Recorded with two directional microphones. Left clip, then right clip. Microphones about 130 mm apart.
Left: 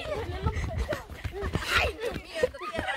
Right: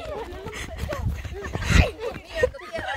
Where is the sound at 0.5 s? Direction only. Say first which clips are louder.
Right 2 dB; 25° right (ahead or behind).